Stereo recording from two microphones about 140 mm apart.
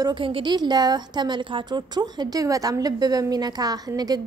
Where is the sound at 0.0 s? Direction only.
30° right (ahead or behind).